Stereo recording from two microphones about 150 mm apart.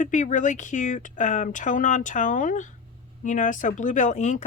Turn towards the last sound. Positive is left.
turn(degrees=55)  # may be behind; listen again after turning